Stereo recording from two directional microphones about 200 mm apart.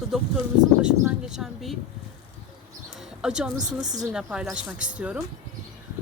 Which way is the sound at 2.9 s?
Centre (ahead or behind).